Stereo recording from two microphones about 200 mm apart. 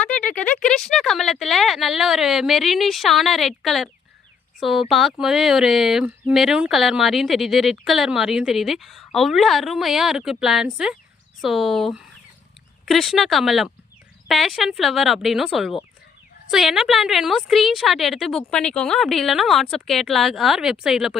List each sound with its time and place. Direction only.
0.0 s speech: 5° left (ahead or behind)